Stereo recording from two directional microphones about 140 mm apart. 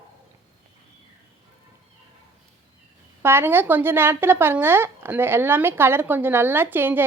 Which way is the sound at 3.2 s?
15° right (ahead or behind).